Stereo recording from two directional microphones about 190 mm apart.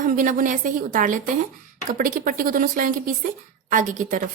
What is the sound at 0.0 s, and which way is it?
Speech, 45° right (ahead or behind).